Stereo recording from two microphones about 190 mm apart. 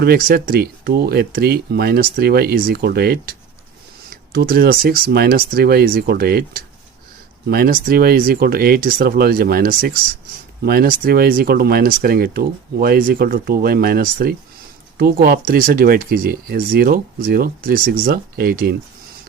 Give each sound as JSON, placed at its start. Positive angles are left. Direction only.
{"t": 0.0, "sound": "speech", "side_deg": -50}